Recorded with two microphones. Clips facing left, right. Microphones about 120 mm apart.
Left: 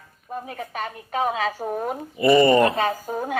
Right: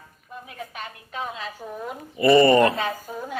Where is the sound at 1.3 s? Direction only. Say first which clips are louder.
Left 9 dB; 90° left.